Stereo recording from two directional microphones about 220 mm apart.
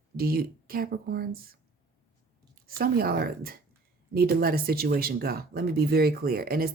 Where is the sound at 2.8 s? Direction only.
45° right (ahead or behind).